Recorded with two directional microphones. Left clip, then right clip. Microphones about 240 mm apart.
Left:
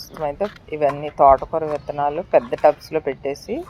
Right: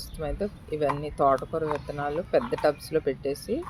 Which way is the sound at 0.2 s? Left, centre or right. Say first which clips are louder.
Left 8 dB; centre.